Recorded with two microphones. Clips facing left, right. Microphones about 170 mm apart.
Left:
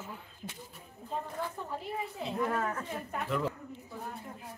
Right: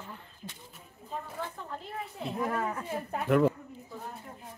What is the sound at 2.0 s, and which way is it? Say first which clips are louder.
Speech: even; centre (ahead or behind).